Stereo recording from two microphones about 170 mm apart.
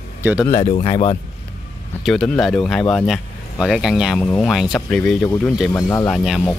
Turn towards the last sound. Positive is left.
turn(degrees=5)  # may be behind; listen again after turning